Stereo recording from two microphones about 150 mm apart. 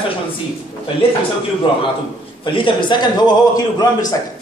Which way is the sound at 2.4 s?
35° left (ahead or behind).